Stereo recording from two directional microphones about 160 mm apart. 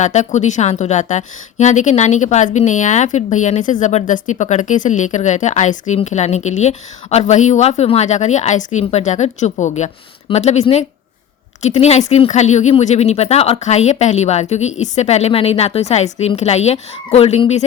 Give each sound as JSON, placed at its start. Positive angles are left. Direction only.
{"t": 0.0, "sound": "a woman's voice", "side_deg": 45}